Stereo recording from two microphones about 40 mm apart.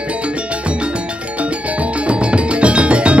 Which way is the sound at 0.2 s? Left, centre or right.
Right.